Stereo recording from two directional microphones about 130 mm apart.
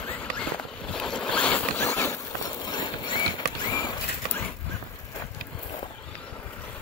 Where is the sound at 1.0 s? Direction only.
5° left (ahead or behind).